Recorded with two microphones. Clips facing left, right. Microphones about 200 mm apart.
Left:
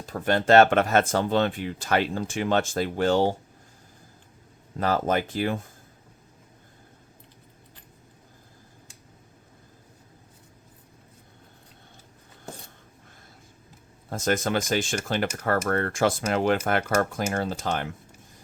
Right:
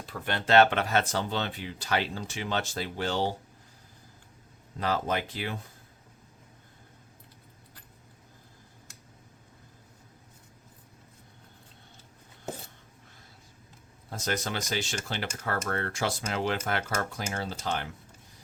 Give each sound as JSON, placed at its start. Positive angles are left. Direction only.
{"t": 0.0, "sound": "speech", "side_deg": 45}
{"t": 4.8, "sound": "speech", "side_deg": 45}
{"t": 14.1, "sound": "speech", "side_deg": 50}